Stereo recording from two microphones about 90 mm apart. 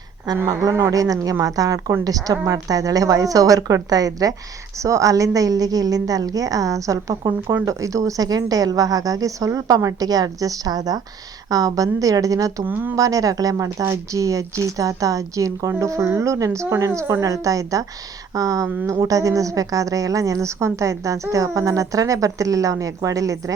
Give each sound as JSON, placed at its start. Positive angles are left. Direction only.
{"t": 0.4, "sound": "a woman's voice", "side_deg": -40}
{"t": 12.6, "sound": "speech", "side_deg": -20}
{"t": 13.0, "sound": "speech", "side_deg": -40}